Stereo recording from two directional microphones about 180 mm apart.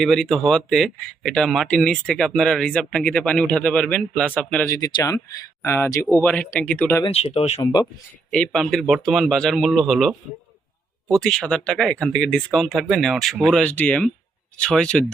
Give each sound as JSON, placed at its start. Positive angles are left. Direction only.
{"t": 0.0, "sound": "speech", "side_deg": 0}
{"t": 4.6, "sound": "speech", "side_deg": 20}
{"t": 7.0, "sound": "speech", "side_deg": 35}
{"t": 7.6, "sound": "speech", "side_deg": 20}
{"t": 8.3, "sound": "speech", "side_deg": 5}